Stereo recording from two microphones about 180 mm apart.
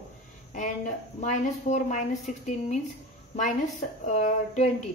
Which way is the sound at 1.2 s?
40° left (ahead or behind).